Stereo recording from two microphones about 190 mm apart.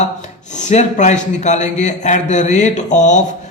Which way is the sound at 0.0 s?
40° left (ahead or behind).